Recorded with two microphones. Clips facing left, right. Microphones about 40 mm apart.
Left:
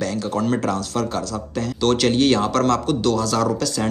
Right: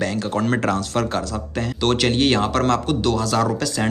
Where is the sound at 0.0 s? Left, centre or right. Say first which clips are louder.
Right 1 dB; right.